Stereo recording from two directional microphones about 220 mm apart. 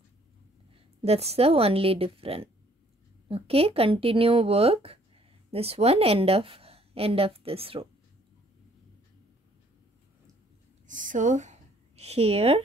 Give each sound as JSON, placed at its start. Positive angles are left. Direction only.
{"t": 1.0, "sound": "a woman's voice", "side_deg": -25}
{"t": 10.9, "sound": "speech", "side_deg": -35}